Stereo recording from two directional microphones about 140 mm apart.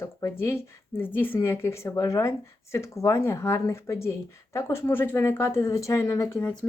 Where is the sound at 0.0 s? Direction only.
20° left (ahead or behind).